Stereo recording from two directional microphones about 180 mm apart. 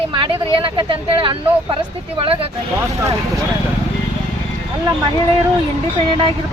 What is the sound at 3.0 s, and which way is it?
Speech, 15° right (ahead or behind).